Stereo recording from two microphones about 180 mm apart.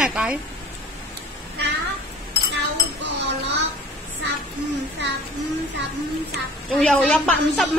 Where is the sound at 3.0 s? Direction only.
70° right (ahead or behind).